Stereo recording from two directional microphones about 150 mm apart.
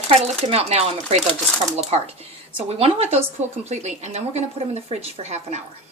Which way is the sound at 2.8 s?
45° right (ahead or behind).